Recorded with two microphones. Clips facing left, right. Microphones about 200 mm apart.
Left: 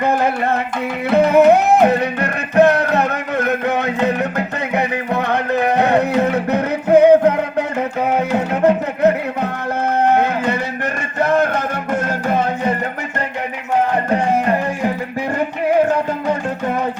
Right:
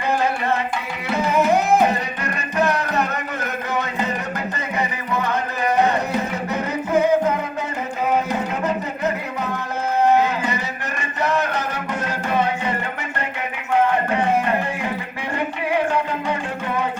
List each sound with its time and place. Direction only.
0.0 s music: 55° left (ahead or behind)
8.6 s music: 60° left (ahead or behind)
10.2 s a sound: 60° left (ahead or behind)
11.2 s music: 50° left (ahead or behind)